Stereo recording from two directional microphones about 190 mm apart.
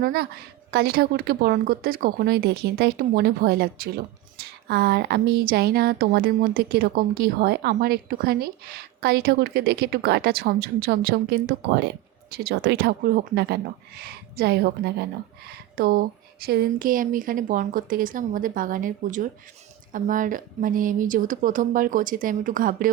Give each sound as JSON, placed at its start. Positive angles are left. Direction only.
{"t": 0.0, "sound": "a woman's voice", "side_deg": -55}